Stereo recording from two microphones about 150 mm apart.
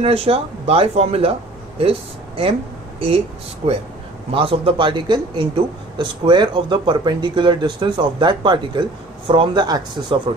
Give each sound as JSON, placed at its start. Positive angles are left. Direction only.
{"t": 0.0, "sound": "speech", "side_deg": -40}
{"t": 3.6, "sound": "speech", "side_deg": -40}